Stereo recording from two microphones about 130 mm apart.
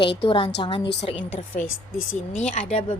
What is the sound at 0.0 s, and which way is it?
Speech, 40° left (ahead or behind).